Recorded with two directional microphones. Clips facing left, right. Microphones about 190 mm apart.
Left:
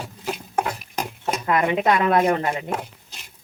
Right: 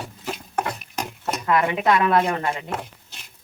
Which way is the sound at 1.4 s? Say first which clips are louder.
Even; 20° left (ahead or behind).